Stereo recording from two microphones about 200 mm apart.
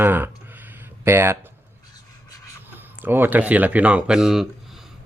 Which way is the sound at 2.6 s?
10° right (ahead or behind).